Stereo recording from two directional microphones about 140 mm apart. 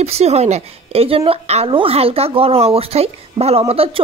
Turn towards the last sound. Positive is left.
turn(degrees=-45)  # may be behind; listen again after turning